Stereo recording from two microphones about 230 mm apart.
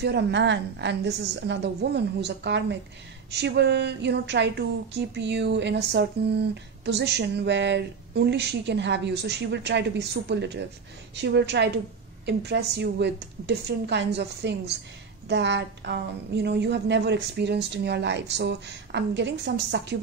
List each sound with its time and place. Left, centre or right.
0.0 s speech: right